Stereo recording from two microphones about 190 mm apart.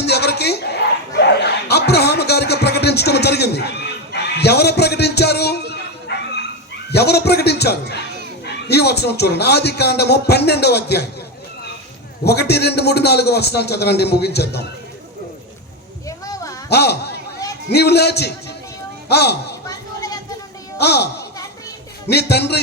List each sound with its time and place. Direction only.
0.0 s chuckle: 60° left (ahead or behind)
6.9 s a man's voice: 60° left (ahead or behind)
12.2 s a man's voice: 60° left (ahead or behind)
16.0 s a sound: 15° left (ahead or behind)
16.6 s a man's voice: 60° left (ahead or behind)
19.6 s a sound: 20° left (ahead or behind)
20.7 s a man's voice: 60° left (ahead or behind)
22.1 s a man's voice: 60° left (ahead or behind)